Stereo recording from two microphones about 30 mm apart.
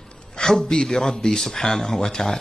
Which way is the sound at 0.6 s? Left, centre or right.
Centre.